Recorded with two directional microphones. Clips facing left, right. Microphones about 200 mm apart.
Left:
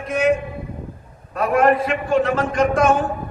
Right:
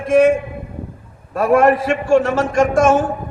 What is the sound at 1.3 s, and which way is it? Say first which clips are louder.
A man's voice: right 4 dB; 45° right (ahead or behind).